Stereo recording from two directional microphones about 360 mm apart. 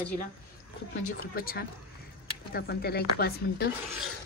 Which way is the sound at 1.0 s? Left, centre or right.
Left.